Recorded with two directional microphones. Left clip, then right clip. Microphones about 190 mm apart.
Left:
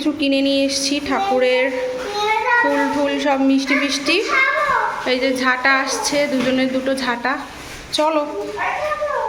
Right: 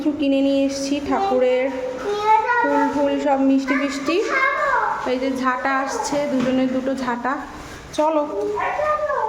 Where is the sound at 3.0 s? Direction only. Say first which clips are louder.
Left 1 dB; 5° right (ahead or behind).